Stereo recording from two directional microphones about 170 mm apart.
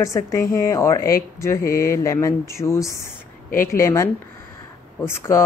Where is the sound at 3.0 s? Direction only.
55° left (ahead or behind).